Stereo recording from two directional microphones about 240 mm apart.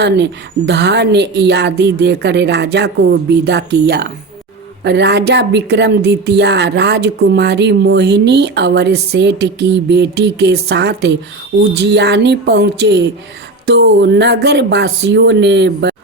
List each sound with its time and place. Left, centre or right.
0.0 s speech: right